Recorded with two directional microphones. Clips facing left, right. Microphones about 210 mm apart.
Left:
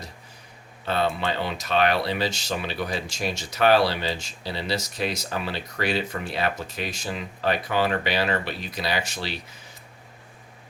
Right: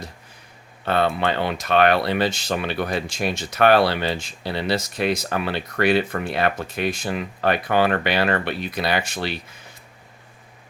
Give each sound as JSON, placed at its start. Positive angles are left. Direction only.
{"t": 0.9, "sound": "speech", "side_deg": -60}